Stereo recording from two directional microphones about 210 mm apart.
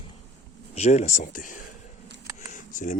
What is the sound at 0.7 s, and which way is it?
Speech, 30° left (ahead or behind).